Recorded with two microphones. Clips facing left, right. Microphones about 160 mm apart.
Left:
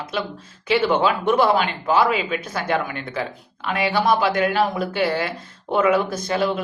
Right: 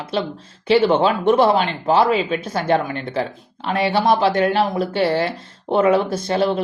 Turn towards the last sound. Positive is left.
turn(degrees=-30)  # may be behind; listen again after turning